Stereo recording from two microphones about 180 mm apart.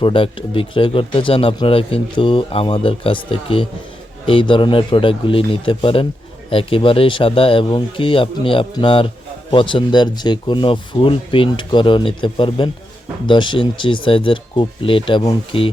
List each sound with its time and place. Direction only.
0.0 s speech: 30° left (ahead or behind)